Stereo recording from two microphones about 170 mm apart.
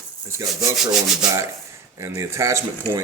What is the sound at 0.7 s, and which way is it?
Rub, centre (ahead or behind).